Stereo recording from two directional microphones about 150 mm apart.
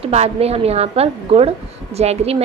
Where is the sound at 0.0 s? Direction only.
45° right (ahead or behind).